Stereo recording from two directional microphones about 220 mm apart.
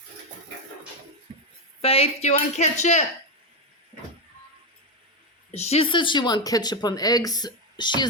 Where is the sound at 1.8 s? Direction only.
25° left (ahead or behind).